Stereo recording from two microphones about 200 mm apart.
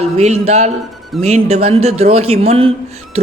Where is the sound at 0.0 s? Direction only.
30° right (ahead or behind).